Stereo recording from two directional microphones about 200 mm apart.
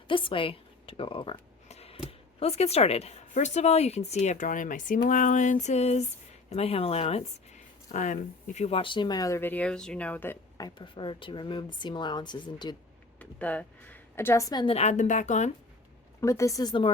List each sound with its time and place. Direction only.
0.1 s speech: 25° left (ahead or behind); by 4.9 s 40° left (ahead or behind)
5.0 s a sound: 40° left (ahead or behind)
7.9 s speech: 40° left (ahead or behind); by 10.7 s 10° left (ahead or behind)
10.8 s a woman's voice: 25° left (ahead or behind)
13.1 s a woman's voice: 5° left (ahead or behind); by 15.5 s 35° left (ahead or behind)
16.2 s speech: 15° left (ahead or behind)